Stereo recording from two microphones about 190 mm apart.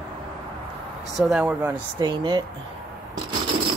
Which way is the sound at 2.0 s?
20° right (ahead or behind).